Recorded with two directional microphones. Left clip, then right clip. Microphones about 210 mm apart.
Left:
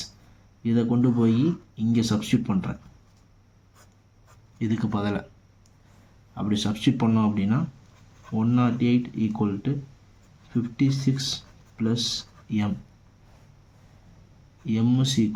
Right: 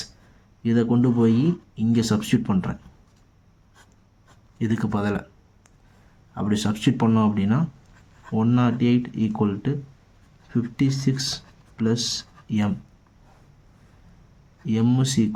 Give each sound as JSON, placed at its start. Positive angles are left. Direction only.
{"t": 0.6, "sound": "speech", "side_deg": -25}
{"t": 4.5, "sound": "speech", "side_deg": -30}
{"t": 6.3, "sound": "speech", "side_deg": -30}
{"t": 14.7, "sound": "speech", "side_deg": -25}